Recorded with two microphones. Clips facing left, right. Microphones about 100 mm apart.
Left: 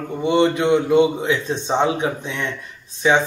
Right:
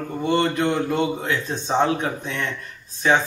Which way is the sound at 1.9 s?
15° left (ahead or behind).